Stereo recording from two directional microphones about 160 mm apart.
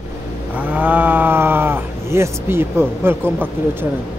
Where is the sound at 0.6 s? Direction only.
10° right (ahead or behind).